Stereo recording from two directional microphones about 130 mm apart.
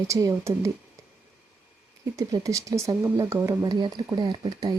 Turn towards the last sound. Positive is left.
turn(degrees=-35)  # may be behind; listen again after turning